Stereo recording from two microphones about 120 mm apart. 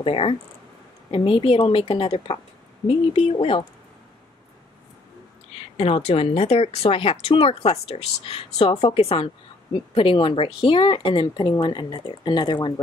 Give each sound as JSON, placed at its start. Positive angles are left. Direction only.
{"t": 0.0, "sound": "speech", "side_deg": 50}
{"t": 5.8, "sound": "speech", "side_deg": 55}